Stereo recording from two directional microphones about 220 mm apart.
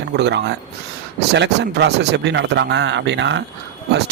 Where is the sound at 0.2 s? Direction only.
50° right (ahead or behind).